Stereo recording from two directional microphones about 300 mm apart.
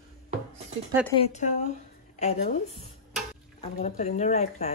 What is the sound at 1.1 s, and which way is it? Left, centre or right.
A woman's voice, left.